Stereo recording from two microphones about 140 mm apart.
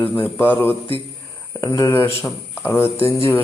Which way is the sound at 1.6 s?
25° left (ahead or behind).